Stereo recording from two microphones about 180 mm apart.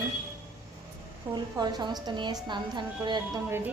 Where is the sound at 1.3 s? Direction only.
25° right (ahead or behind).